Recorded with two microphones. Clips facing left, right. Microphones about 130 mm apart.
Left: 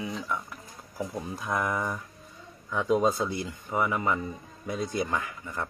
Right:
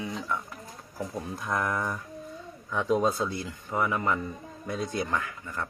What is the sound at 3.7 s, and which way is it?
Speech, 5° left (ahead or behind).